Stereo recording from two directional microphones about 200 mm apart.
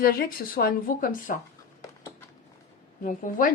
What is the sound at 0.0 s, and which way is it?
A woman's voice, 50° left (ahead or behind).